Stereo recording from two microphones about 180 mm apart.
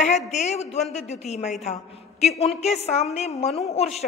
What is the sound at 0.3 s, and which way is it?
A woman's voice, 40° left (ahead or behind).